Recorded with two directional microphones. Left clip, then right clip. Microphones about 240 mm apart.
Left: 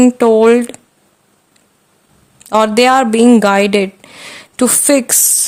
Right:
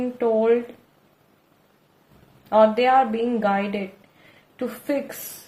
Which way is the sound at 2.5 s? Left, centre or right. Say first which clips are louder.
Left 7 dB; left.